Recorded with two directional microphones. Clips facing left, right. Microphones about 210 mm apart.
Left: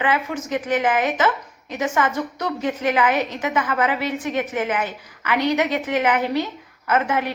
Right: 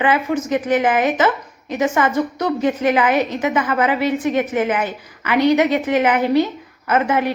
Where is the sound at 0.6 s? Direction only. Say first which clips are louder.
Right 2 dB; 40° right (ahead or behind).